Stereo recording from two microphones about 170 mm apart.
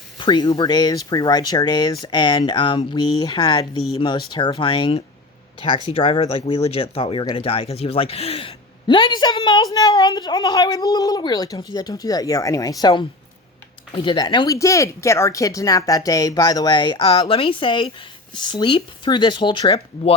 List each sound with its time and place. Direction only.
0.2 s speech: 25° left (ahead or behind)